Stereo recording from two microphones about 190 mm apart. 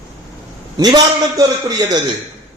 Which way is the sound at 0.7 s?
20° right (ahead or behind).